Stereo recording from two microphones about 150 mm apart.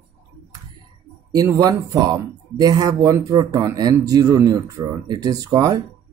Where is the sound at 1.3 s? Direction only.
25° right (ahead or behind).